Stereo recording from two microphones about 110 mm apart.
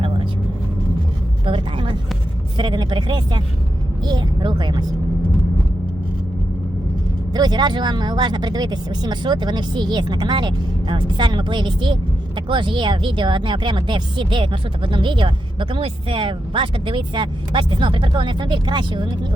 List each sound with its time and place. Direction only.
1.5 s speech: 50° right (ahead or behind)
7.3 s speech: 40° right (ahead or behind)